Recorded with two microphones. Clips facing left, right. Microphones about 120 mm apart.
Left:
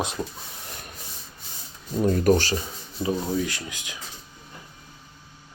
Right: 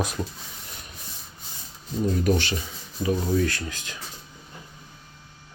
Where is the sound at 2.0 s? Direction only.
50° left (ahead or behind).